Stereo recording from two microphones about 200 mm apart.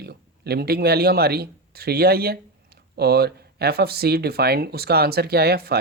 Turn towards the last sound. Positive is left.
turn(degrees=-50)  # may be behind; listen again after turning